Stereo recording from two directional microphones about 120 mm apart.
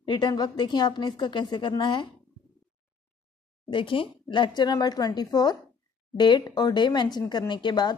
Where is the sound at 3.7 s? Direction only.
45° left (ahead or behind).